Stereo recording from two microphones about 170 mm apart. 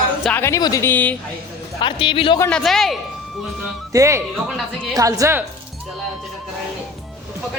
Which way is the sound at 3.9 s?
20° right (ahead or behind).